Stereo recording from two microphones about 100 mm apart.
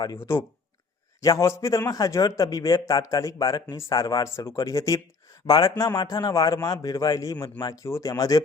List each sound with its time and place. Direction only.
0.2 s speech: 25° left (ahead or behind)